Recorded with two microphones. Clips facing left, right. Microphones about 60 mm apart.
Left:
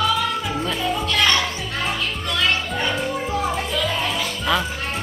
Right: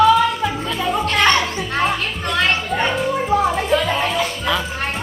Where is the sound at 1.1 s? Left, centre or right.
Right.